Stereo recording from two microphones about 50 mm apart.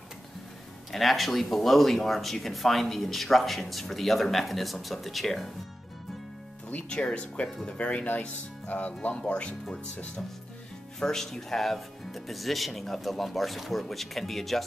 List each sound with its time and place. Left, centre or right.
0.9 s speech: centre
6.9 s speech: left
11.0 s speech: centre